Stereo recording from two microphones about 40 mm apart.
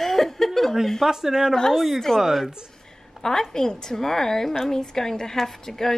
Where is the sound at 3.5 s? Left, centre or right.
Centre.